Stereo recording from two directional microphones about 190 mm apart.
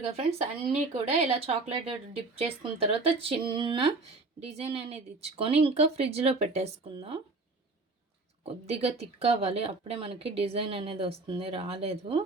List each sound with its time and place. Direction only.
0.1 s speech: 30° right (ahead or behind)
8.4 s speech: 30° right (ahead or behind)